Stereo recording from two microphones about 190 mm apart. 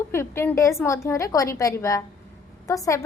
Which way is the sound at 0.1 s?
15° left (ahead or behind).